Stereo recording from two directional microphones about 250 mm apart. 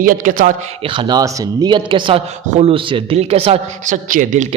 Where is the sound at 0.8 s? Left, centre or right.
Centre.